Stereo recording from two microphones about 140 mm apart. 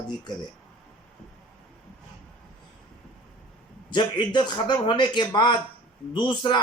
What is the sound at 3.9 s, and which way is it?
A man's voice, 35° left (ahead or behind).